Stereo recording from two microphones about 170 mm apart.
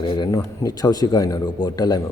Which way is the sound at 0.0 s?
25° left (ahead or behind).